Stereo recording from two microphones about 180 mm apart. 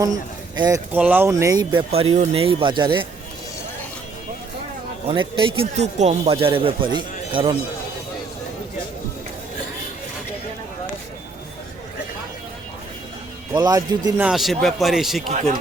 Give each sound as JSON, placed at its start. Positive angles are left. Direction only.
{"t": 0.0, "sound": "speech", "side_deg": -20}
{"t": 0.9, "sound": "speech", "side_deg": -10}
{"t": 1.9, "sound": "speech", "side_deg": -35}
{"t": 5.0, "sound": "speech", "side_deg": -25}
{"t": 13.6, "sound": "speech", "side_deg": -20}
{"t": 14.2, "sound": "speech", "side_deg": -5}